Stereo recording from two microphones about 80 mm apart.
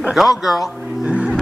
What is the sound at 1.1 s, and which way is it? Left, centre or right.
Music, centre.